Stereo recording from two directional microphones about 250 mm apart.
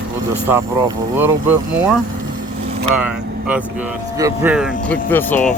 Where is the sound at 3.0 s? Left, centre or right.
Centre.